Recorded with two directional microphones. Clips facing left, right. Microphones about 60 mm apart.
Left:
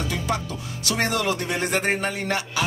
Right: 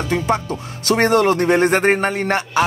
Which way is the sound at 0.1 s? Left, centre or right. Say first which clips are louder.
Right 8 dB; right.